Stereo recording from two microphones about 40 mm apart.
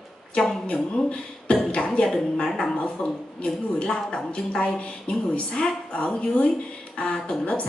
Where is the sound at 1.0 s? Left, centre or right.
Left.